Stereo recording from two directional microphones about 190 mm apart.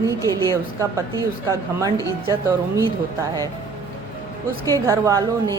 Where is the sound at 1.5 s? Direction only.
15° right (ahead or behind).